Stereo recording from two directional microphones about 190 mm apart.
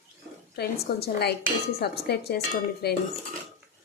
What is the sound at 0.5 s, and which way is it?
Speech, 55° left (ahead or behind).